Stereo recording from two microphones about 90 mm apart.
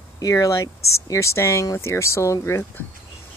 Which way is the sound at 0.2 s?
40° left (ahead or behind).